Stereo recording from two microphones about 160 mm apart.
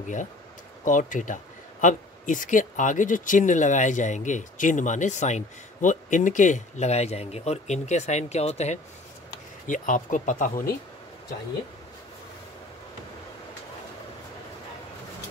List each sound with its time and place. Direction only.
0.8 s speech: 55° left (ahead or behind)
9.7 s speech: 55° left (ahead or behind)